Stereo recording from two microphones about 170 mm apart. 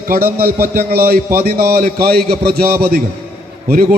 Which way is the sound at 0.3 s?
60° right (ahead or behind).